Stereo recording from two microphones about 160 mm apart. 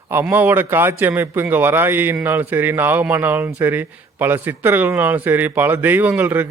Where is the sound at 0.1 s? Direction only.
15° right (ahead or behind).